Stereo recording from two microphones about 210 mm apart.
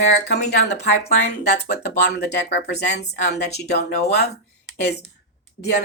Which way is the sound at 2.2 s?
55° left (ahead or behind).